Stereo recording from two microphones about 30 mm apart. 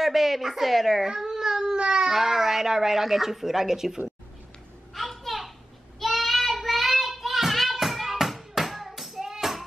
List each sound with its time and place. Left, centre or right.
0.0 s a woman's voice: centre
1.0 s baby cry: centre
1.8 s cat: right
2.0 s speech: centre
4.9 s a sound: centre
5.9 s child singing: centre
7.8 s a sound: centre
9.3 s music: centre